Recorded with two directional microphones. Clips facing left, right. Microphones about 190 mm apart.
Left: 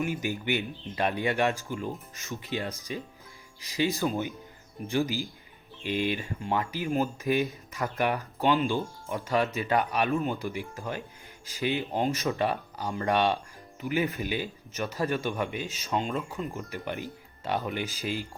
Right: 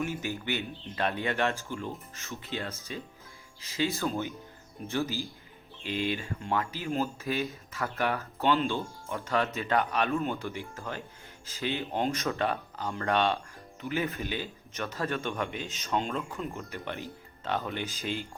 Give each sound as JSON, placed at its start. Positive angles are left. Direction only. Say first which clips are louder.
{"t": 0.0, "sound": "speech", "louder": "left 3 dB", "side_deg": 15}
{"t": 11.9, "sound": "speech", "louder": "even", "side_deg": 0}
{"t": 12.2, "sound": "speech", "louder": "left 2 dB", "side_deg": 15}
{"t": 16.7, "sound": "speech", "louder": "left 3 dB", "side_deg": 15}